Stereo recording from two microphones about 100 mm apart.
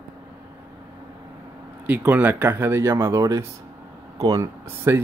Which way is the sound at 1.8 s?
15° right (ahead or behind).